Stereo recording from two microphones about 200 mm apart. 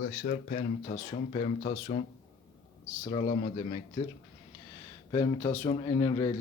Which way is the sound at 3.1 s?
30° left (ahead or behind).